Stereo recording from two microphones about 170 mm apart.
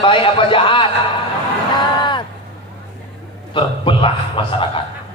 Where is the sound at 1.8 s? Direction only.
25° left (ahead or behind).